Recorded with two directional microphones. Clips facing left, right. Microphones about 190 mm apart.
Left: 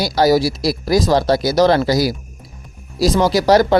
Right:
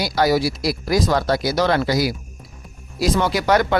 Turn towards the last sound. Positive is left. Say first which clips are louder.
# left 5 dB
turn(degrees=35)  # may be behind; listen again after turning